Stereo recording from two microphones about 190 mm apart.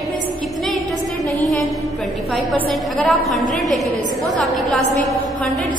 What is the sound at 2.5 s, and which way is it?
A woman's voice, 5° left (ahead or behind).